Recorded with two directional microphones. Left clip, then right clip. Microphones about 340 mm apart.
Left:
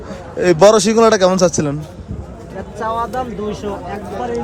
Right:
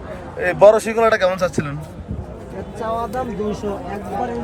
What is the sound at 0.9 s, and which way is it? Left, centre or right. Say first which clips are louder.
Speech: left 4 dB; centre.